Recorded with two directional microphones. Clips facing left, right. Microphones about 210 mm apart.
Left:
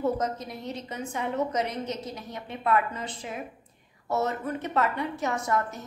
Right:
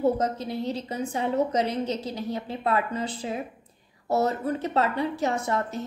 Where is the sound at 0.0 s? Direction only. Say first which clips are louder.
Right 4 dB; 30° right (ahead or behind).